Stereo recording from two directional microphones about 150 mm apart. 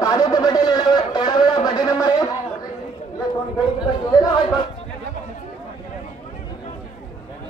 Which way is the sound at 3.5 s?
25° left (ahead or behind).